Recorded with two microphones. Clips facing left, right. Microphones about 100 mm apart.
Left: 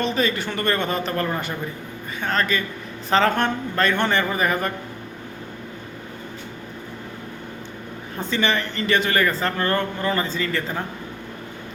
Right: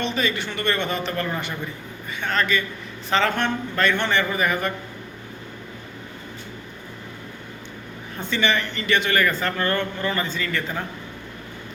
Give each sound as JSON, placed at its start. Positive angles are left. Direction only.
{"t": 0.0, "sound": "a man's voice", "side_deg": 40}
{"t": 8.2, "sound": "a man's voice", "side_deg": 35}